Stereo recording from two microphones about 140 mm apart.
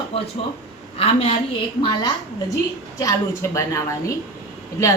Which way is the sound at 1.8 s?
30° left (ahead or behind).